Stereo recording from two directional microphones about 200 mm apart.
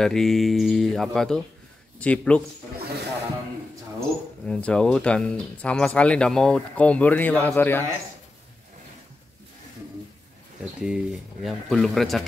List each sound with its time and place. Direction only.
0.0 s speech: centre (ahead or behind)
2.8 s snake: 55° right (ahead or behind)
4.5 s speech: 5° left (ahead or behind)
10.6 s speech: 5° right (ahead or behind)